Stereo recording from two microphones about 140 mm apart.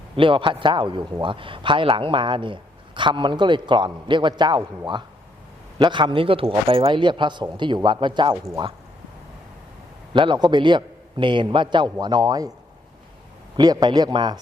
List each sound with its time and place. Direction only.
0.2 s speech: 35° right (ahead or behind)
5.8 s speech: 35° right (ahead or behind)
10.1 s speech: 35° right (ahead or behind)
13.6 s a man's voice: 30° right (ahead or behind)